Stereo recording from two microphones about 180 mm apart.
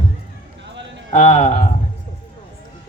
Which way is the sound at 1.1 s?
45° left (ahead or behind).